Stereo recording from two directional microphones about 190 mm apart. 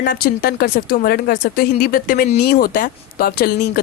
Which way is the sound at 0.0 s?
50° left (ahead or behind).